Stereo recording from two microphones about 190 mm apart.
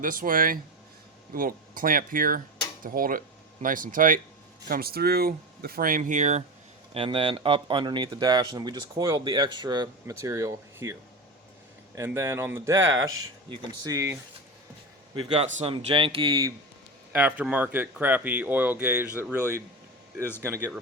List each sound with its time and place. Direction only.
0.0 s speech: 45° right (ahead or behind)
6.9 s speech: 30° right (ahead or behind)
11.9 s speech: 15° right (ahead or behind)
12.9 s speech: 90° right
13.8 s speech: 15° right (ahead or behind)
15.1 s a man's voice: 30° right (ahead or behind)
17.1 s speech: 5° right (ahead or behind)